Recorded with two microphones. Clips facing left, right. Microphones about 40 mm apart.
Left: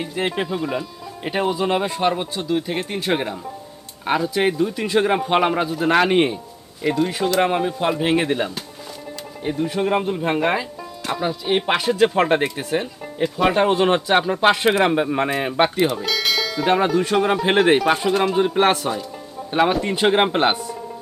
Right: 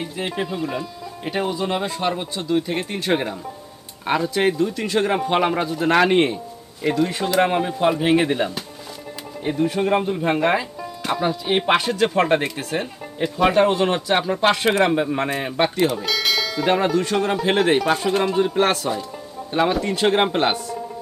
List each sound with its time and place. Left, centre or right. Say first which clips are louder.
0.2 s speech: left 5 dB; left
0.5 s speech: left 2 dB; centre
2.3 s speech: right 1 dB; centre
12.8 s speech: left 2 dB; centre
13.5 s speech: right 2 dB; centre
13.7 s speech: left 3 dB; left
14.2 s speech: left 2 dB; centre